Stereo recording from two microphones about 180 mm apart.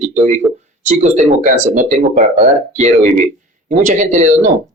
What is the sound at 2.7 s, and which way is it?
A man's voice, 40° right (ahead or behind).